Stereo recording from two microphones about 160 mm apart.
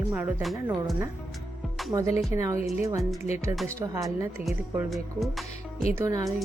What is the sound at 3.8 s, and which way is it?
Speech, 20° right (ahead or behind).